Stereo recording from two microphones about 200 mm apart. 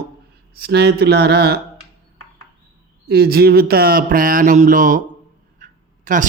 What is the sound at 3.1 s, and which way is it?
Mantra, 50° right (ahead or behind).